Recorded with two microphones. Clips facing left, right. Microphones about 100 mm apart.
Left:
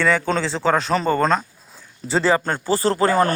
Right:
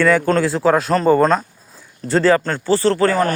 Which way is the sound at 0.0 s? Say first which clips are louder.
Right 5 dB; 5° right (ahead or behind).